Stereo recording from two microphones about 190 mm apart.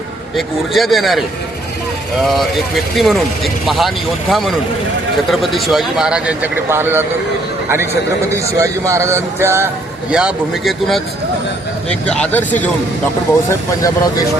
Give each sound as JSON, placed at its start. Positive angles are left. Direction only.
{"t": 0.3, "sound": "speech", "side_deg": 0}
{"t": 2.2, "sound": "speech", "side_deg": 0}
{"t": 8.5, "sound": "speech", "side_deg": -15}